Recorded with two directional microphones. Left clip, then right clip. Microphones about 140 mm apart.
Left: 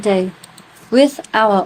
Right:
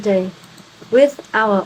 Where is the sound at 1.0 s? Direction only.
50° left (ahead or behind).